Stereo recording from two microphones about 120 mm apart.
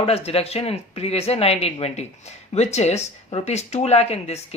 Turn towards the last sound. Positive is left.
turn(degrees=60)  # may be behind; listen again after turning